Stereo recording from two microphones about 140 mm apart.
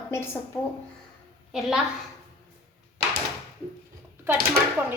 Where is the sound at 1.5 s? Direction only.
Centre (ahead or behind).